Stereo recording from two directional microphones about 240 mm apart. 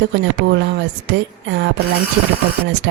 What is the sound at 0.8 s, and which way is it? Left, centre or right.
Speech, right.